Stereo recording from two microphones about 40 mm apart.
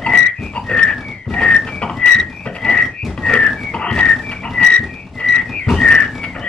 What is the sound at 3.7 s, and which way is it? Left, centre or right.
Whistling, left.